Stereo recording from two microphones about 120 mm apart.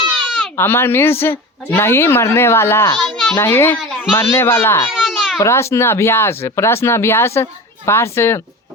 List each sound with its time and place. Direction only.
0.5 s a woman's voice: 20° left (ahead or behind)
3.0 s a sound: centre (ahead or behind)
3.3 s a woman's voice: 20° left (ahead or behind)
3.8 s children playing: centre (ahead or behind)
4.1 s a woman's voice: 20° left (ahead or behind)
4.9 s baby cry: 5° right (ahead or behind)
5.4 s a woman's voice: 25° left (ahead or behind)